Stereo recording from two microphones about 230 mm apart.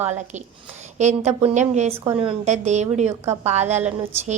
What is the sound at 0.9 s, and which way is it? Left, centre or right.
A woman's voice, right.